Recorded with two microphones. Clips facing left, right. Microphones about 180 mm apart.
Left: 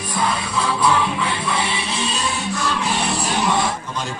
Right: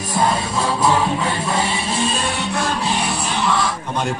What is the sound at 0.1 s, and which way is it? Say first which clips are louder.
Music: right 3 dB; 45° right (ahead or behind).